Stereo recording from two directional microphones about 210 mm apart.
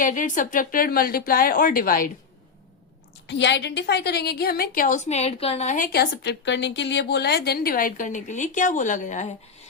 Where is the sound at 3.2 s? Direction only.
55° left (ahead or behind).